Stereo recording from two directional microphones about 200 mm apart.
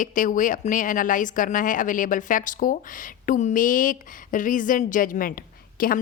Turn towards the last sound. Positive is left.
turn(degrees=45)  # may be behind; listen again after turning